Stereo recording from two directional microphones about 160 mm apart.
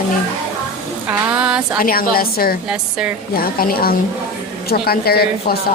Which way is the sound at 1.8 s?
65° left (ahead or behind).